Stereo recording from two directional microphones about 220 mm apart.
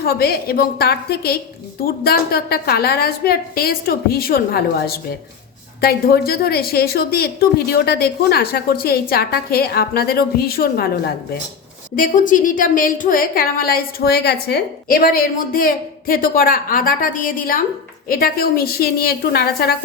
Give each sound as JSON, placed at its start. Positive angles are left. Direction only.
{"t": 0.0, "sound": "a woman's voice", "side_deg": 45}